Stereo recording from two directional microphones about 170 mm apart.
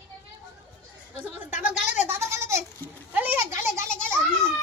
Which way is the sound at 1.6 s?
10° right (ahead or behind).